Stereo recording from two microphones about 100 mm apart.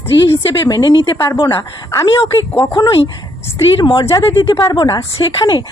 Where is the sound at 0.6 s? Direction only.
45° left (ahead or behind).